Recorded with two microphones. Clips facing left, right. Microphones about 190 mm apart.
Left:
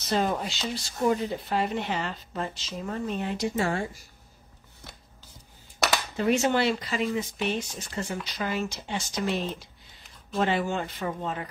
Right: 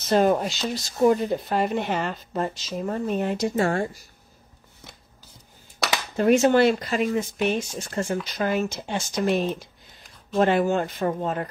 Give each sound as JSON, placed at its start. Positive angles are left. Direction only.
{"t": 0.1, "sound": "speech", "side_deg": -50}
{"t": 6.1, "sound": "speech", "side_deg": -50}